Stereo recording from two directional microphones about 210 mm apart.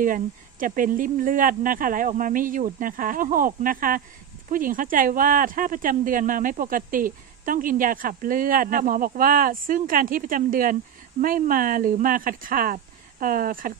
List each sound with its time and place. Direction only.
0.0 s speech: 40° right (ahead or behind)